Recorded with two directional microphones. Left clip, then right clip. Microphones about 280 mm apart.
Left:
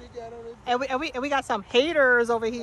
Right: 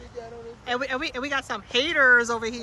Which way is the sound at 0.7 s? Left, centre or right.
Centre.